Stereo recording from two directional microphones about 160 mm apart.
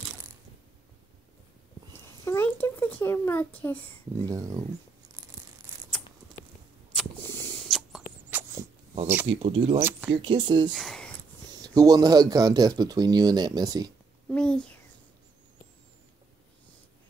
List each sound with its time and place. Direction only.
2.2 s a child's voice: 10° left (ahead or behind)
4.3 s speech: 20° right (ahead or behind)
5.9 s a sound: 10° left (ahead or behind)
7.6 s a sound: centre (ahead or behind)
8.3 s dog: 10° right (ahead or behind)
9.0 s speech: 10° right (ahead or behind)
9.3 s speech: 35° right (ahead or behind)
9.8 s speech: 10° right (ahead or behind)
10.1 s speech: 30° right (ahead or behind)
10.7 s speech: centre (ahead or behind)
11.5 s speech: 25° right (ahead or behind)
14.3 s speech: 5° left (ahead or behind)